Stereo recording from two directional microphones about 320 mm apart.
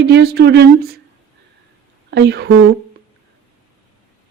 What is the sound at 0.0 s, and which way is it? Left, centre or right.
Speech, right.